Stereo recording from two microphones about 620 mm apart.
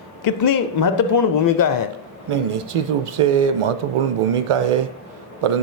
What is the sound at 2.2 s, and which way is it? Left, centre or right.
Speech, right.